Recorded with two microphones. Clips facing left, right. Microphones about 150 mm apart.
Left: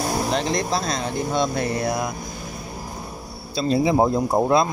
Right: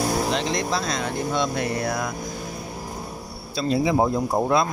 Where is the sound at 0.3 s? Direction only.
40° left (ahead or behind).